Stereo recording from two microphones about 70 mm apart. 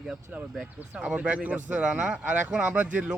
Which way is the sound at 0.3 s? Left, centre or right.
Centre.